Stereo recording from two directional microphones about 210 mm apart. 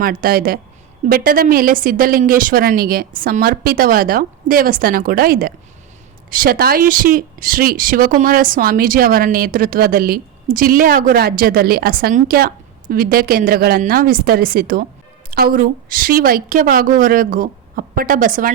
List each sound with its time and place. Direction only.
0.0 s a woman's voice: 45° right (ahead or behind)